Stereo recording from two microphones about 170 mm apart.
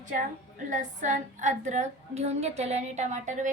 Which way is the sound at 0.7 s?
50° right (ahead or behind).